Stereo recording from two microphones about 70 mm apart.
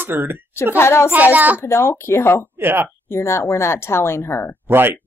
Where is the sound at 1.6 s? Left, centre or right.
Left.